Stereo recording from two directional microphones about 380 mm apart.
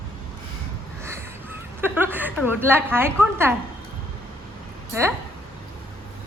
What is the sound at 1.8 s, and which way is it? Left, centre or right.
Speech, centre.